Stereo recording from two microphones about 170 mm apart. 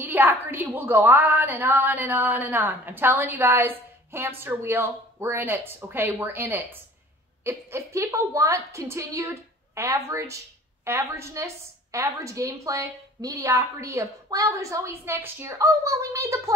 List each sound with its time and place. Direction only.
0.0 s a woman's voice: 10° right (ahead or behind)